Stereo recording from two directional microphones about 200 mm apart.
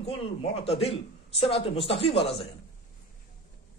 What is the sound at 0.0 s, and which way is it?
A man's voice, 30° left (ahead or behind).